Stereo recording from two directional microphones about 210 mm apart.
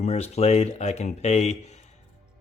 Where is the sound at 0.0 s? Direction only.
30° left (ahead or behind).